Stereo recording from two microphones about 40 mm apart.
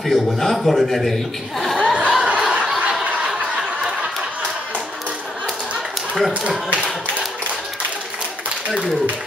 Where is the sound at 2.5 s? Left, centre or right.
Right.